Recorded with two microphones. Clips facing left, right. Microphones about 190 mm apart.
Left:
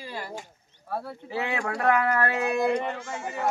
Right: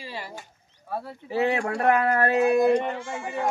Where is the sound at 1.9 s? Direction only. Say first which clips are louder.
Right 3 dB; 25° right (ahead or behind).